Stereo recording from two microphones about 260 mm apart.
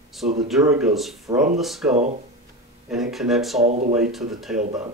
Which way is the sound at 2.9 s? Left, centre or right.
Centre.